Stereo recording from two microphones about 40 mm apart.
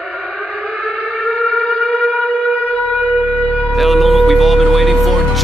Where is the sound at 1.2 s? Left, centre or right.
Left.